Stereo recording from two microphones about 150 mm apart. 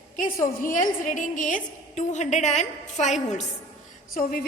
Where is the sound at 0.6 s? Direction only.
60° left (ahead or behind).